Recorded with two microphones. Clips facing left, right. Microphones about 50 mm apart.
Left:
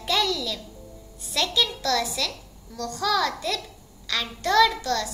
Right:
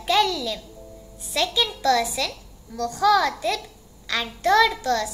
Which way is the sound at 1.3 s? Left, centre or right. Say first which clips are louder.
Right 1 dB; centre.